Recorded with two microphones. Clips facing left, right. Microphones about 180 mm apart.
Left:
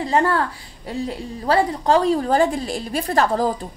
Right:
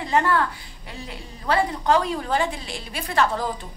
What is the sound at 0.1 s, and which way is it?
A woman's voice, 35° left (ahead or behind).